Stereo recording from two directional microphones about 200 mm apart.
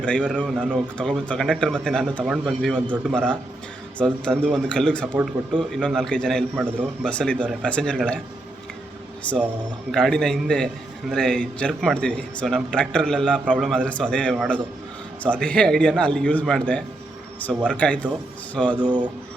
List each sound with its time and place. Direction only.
0.0 s a man's voice: 5° left (ahead or behind)
9.9 s a man's voice: 5° left (ahead or behind)
18.9 s speech: 20° right (ahead or behind)